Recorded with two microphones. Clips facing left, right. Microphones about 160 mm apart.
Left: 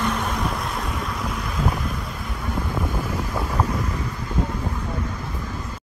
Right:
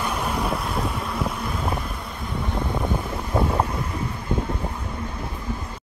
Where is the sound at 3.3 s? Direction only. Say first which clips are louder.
Right 9 dB; 25° right (ahead or behind).